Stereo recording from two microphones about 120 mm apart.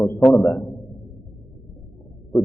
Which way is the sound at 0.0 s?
10° left (ahead or behind).